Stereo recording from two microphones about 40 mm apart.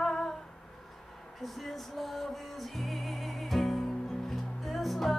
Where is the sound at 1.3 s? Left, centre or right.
Centre.